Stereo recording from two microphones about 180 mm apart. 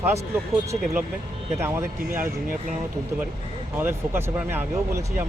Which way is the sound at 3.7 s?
10° right (ahead or behind).